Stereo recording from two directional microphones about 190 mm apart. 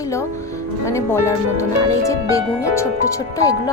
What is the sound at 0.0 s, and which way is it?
A woman's voice, 15° left (ahead or behind).